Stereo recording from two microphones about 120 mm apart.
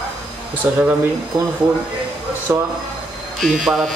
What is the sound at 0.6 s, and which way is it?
A man's voice, 15° right (ahead or behind).